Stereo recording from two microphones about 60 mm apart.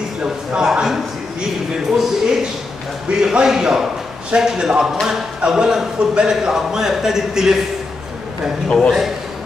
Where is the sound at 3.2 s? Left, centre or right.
Centre.